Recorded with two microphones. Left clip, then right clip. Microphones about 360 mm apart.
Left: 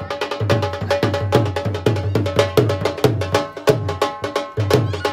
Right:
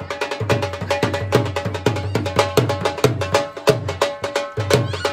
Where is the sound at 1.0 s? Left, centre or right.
Centre.